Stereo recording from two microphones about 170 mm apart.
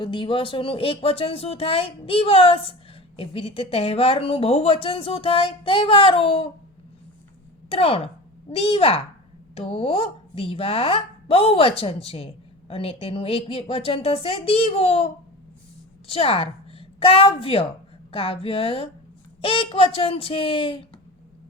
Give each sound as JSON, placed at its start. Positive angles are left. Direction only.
{"t": 0.0, "sound": "speech", "side_deg": 30}
{"t": 7.7, "sound": "a woman's voice", "side_deg": 35}